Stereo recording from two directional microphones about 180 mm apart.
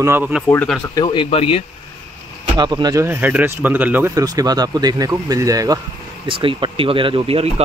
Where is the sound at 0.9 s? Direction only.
25° left (ahead or behind).